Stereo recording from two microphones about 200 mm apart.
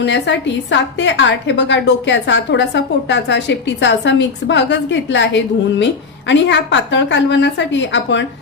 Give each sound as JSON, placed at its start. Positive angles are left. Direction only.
{"t": 0.0, "sound": "a woman's voice", "side_deg": 65}